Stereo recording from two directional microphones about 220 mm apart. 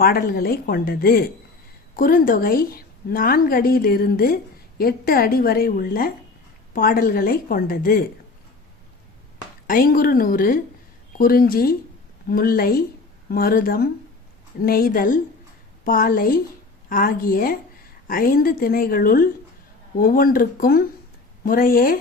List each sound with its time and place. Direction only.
0.0 s a woman's voice: 40° left (ahead or behind)
9.6 s a woman's voice: 40° left (ahead or behind)